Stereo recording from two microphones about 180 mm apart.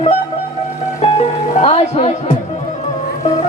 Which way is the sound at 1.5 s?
35° left (ahead or behind).